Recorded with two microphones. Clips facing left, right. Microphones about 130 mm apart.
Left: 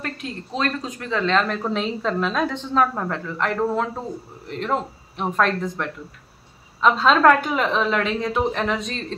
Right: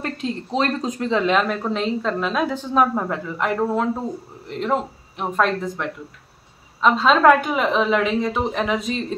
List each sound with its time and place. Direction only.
0.0 s speech: 25° right (ahead or behind)
1.2 s a woman's voice: 10° right (ahead or behind)